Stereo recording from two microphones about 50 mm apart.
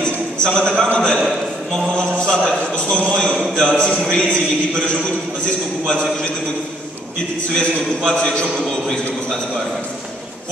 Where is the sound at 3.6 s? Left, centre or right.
Centre.